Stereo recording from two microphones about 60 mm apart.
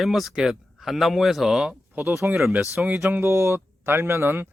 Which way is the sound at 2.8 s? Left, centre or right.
Right.